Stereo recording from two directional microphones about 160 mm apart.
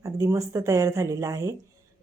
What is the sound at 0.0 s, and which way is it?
A woman's voice, 20° right (ahead or behind).